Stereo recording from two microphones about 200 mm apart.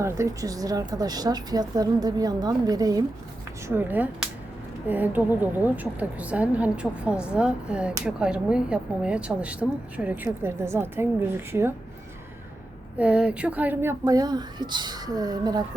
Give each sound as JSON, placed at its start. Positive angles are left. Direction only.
{"t": 0.0, "sound": "a woman's voice", "side_deg": -15}
{"t": 13.0, "sound": "a woman's voice", "side_deg": -5}